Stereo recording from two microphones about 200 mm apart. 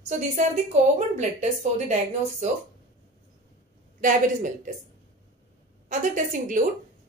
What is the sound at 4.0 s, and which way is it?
Speech, 40° right (ahead or behind).